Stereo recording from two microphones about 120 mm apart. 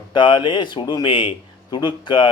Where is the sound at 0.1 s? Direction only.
40° left (ahead or behind).